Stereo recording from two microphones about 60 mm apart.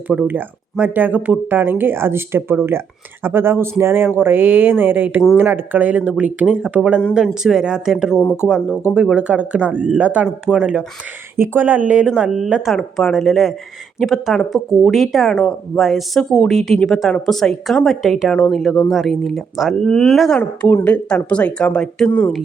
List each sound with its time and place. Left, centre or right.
0.3 s speech: right
10.5 s speech: centre
11.3 s speech: right
11.6 s a woman's voice: right; by 12.7 s centre
12.7 s a woman's voice: centre
15.3 s speech: centre
15.8 s a woman's voice: centre
18.3 s a woman's voice: centre
20.4 s speech: left
20.8 s speech: left